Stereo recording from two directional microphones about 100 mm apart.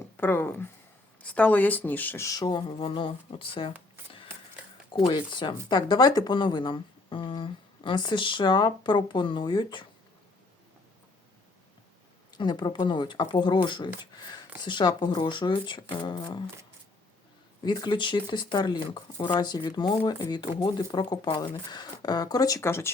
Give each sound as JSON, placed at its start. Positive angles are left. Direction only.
{"t": 0.2, "sound": "speech", "side_deg": 20}
{"t": 2.2, "sound": "speech", "side_deg": 40}
{"t": 4.9, "sound": "speech", "side_deg": 55}
{"t": 12.4, "sound": "speech", "side_deg": 50}
{"t": 17.6, "sound": "speech", "side_deg": 45}
{"t": 22.6, "sound": "speech", "side_deg": 25}